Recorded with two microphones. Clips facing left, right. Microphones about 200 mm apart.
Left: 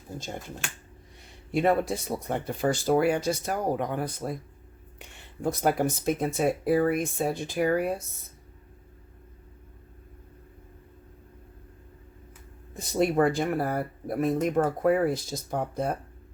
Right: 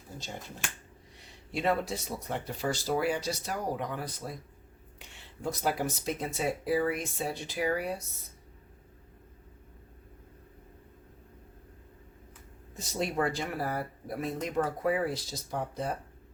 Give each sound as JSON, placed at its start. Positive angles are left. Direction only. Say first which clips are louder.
{"t": 1.5, "sound": "speech", "louder": "left 6 dB", "side_deg": 55}
{"t": 12.7, "sound": "speech", "louder": "left 8 dB", "side_deg": 55}